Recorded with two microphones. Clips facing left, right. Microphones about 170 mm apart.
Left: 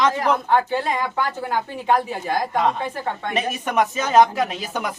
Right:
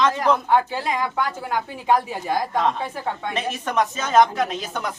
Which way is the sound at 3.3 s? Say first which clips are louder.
Left 4 dB; 10° left (ahead or behind).